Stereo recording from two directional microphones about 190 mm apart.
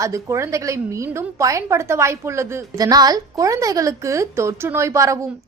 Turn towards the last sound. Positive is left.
turn(degrees=-15)  # may be behind; listen again after turning